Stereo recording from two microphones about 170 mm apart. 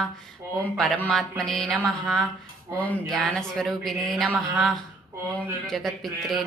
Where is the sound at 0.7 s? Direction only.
5° left (ahead or behind).